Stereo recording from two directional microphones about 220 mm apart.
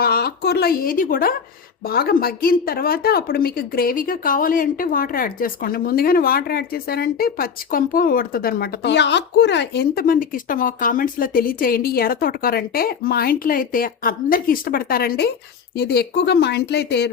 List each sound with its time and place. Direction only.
0.0 s speech: 45° left (ahead or behind)